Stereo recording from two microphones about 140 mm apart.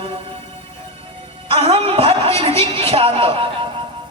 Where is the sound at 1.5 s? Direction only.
40° right (ahead or behind).